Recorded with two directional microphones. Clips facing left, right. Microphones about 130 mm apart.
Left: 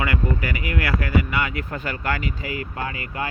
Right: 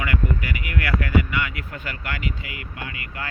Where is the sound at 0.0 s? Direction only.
30° left (ahead or behind).